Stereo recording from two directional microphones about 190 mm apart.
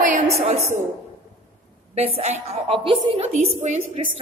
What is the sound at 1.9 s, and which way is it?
A woman's voice, 30° right (ahead or behind).